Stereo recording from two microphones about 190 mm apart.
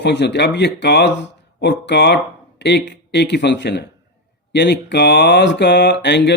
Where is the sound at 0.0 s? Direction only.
65° left (ahead or behind).